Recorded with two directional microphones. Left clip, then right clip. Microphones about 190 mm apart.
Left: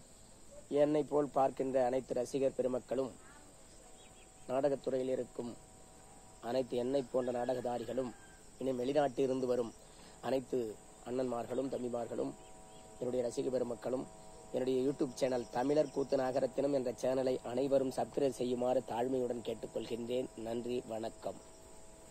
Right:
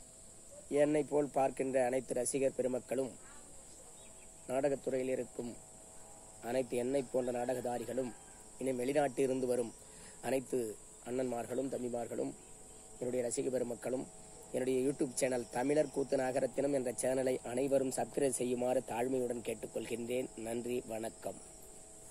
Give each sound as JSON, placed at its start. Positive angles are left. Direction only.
{"t": 0.7, "sound": "speech", "side_deg": 0}
{"t": 4.5, "sound": "speech", "side_deg": 0}
{"t": 6.4, "sound": "speech", "side_deg": 0}